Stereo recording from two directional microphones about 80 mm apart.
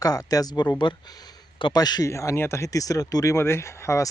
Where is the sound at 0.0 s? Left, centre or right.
Left.